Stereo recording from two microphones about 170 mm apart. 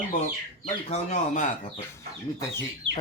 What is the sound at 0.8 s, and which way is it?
Speech, 45° left (ahead or behind).